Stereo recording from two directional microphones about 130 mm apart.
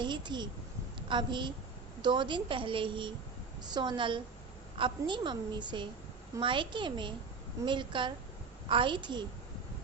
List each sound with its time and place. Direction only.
0.0 s a child's voice: 35° right (ahead or behind)